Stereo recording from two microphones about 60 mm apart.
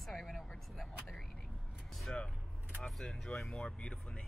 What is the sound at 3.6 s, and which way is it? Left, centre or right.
Speech, centre.